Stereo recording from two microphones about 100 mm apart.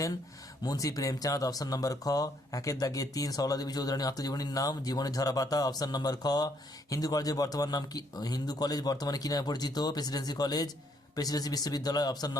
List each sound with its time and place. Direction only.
0.6 s speech: 35° left (ahead or behind)